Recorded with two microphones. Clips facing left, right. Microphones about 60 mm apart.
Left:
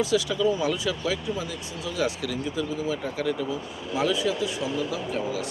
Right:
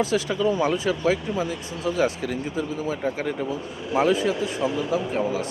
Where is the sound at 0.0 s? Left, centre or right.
Right.